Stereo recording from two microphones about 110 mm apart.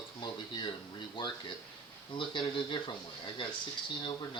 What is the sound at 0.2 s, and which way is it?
Speech, 40° left (ahead or behind).